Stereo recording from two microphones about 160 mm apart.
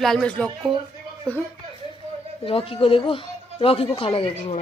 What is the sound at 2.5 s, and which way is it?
A woman's voice, 35° left (ahead or behind).